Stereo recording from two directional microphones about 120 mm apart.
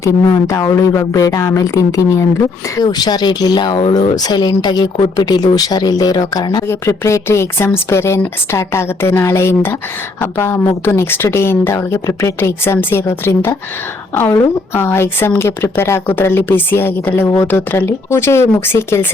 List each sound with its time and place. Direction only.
0.0 s a woman's voice: 30° left (ahead or behind); by 4.1 s 45° left (ahead or behind)
4.1 s speech: 35° left (ahead or behind)
6.7 s a woman's voice: 25° left (ahead or behind)